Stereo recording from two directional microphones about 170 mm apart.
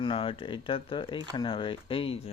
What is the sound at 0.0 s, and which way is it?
Speech, 30° left (ahead or behind).